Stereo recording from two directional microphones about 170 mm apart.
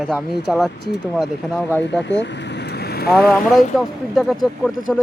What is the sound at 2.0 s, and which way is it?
Vehicle, 90° left.